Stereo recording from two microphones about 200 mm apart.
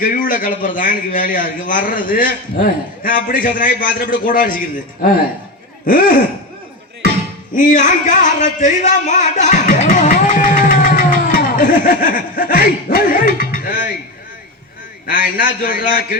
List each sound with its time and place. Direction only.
0.0 s a man's voice: 45° left (ahead or behind)
5.8 s a man's voice: 45° left (ahead or behind)
7.5 s speech: 40° left (ahead or behind)
15.0 s a man's voice: 45° left (ahead or behind)